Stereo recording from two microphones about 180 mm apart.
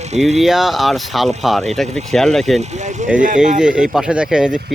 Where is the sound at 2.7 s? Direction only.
40° right (ahead or behind).